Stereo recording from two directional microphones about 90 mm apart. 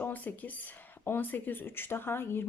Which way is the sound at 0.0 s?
20° left (ahead or behind).